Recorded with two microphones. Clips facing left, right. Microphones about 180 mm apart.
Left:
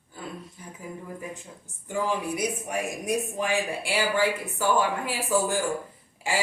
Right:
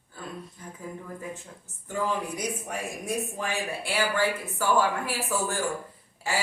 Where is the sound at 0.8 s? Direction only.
15° left (ahead or behind).